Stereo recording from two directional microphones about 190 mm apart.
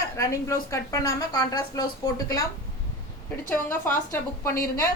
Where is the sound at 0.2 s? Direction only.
15° left (ahead or behind).